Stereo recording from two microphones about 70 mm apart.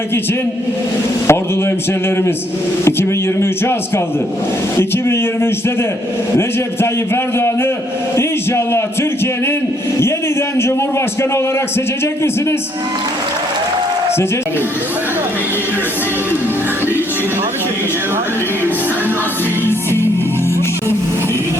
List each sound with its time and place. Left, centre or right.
1.3 s a man's voice: left
7.3 s a man's voice: left
19.6 s music: left